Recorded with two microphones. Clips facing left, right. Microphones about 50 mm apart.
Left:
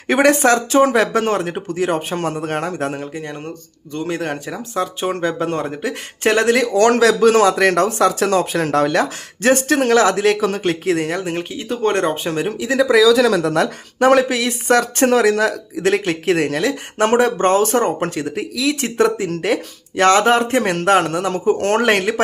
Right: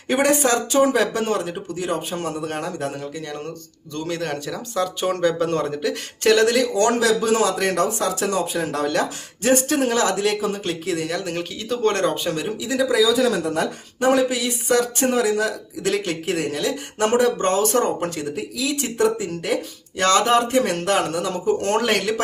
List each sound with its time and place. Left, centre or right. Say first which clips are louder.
0.1 s speech: left 5 dB; left
3.9 s speech: left 3 dB; left
6.3 s speech: left 3 dB; left
11.2 s speech: left 4 dB; left
20.0 s speech: left 4 dB; left